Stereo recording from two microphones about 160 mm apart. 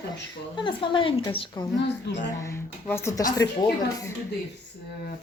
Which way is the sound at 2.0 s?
90° left.